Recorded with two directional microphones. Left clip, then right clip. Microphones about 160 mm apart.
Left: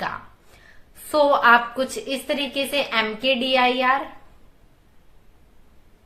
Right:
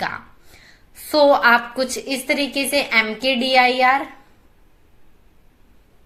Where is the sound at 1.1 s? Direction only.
20° right (ahead or behind).